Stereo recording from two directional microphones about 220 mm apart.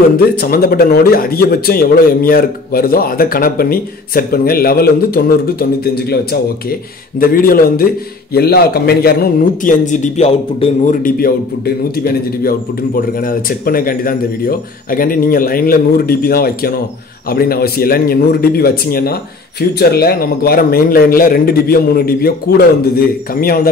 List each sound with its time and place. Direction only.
0.4 s speech: 40° left (ahead or behind)
7.2 s speech: 40° left (ahead or behind)